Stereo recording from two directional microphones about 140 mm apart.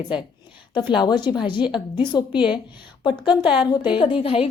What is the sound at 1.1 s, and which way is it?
Speech, 30° left (ahead or behind).